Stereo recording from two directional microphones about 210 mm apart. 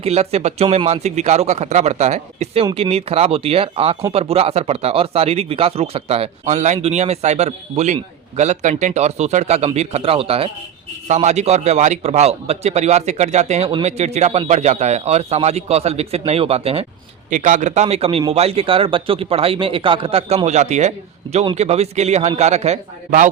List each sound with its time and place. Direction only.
0.0 s a man's voice: 30° right (ahead or behind)